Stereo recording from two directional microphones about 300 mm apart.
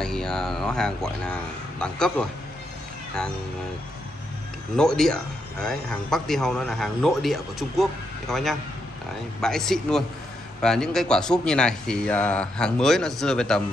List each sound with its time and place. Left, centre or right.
0.0 s speech: centre
4.7 s speech: centre